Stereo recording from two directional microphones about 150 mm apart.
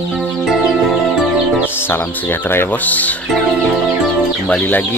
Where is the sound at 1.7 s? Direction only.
15° left (ahead or behind).